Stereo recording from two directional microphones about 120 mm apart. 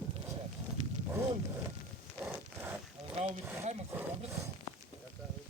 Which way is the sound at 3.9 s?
20° right (ahead or behind).